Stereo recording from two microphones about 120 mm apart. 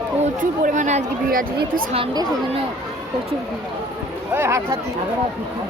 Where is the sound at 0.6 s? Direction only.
90° right.